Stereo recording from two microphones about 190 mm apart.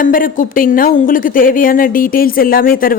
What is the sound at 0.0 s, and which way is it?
Speech, 45° left (ahead or behind).